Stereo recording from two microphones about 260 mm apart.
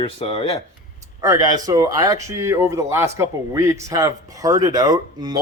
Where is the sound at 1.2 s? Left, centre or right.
Centre.